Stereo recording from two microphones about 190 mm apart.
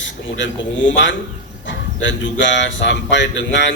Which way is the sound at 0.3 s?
75° left (ahead or behind).